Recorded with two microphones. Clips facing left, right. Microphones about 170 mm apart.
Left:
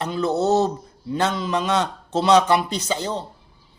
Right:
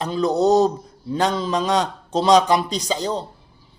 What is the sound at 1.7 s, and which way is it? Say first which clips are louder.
Speech: right 1 dB; 15° right (ahead or behind).